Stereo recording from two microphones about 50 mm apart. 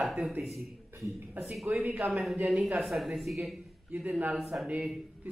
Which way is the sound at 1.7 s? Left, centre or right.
Right.